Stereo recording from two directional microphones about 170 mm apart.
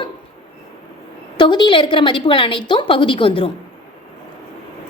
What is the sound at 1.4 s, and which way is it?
A woman's voice, 25° left (ahead or behind).